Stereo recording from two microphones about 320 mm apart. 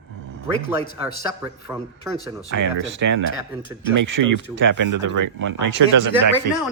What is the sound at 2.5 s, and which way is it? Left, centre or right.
Speech, right.